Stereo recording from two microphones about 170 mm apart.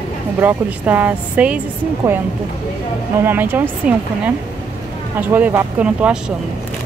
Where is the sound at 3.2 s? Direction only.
10° right (ahead or behind).